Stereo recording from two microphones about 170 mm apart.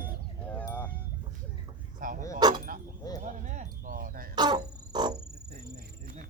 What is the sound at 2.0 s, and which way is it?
Speech, 50° right (ahead or behind).